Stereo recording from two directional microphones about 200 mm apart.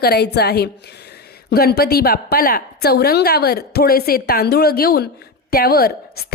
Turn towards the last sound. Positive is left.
turn(degrees=50)  # may be behind; listen again after turning